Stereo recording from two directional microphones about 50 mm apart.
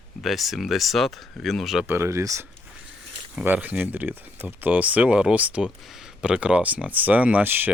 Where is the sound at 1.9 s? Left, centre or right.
Right.